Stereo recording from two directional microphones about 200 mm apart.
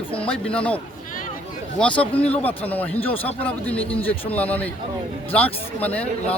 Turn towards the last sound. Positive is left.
turn(degrees=5)  # may be behind; listen again after turning